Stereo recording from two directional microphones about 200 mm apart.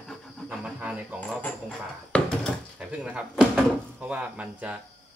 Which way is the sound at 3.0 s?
5° right (ahead or behind).